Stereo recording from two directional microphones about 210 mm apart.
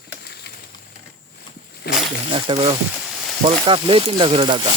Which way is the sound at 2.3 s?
25° right (ahead or behind).